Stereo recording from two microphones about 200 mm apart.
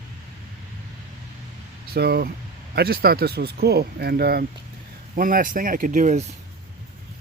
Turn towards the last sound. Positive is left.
turn(degrees=-35)  # may be behind; listen again after turning